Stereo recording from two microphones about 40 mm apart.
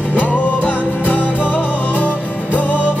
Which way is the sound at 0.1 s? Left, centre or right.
Left.